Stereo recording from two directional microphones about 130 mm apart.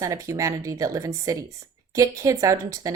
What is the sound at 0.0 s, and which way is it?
A woman's voice, 25° right (ahead or behind).